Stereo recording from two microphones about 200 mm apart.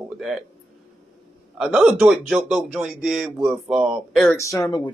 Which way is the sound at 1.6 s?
5° right (ahead or behind).